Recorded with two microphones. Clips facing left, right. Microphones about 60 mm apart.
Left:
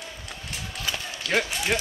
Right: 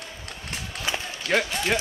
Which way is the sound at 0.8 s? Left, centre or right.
Right.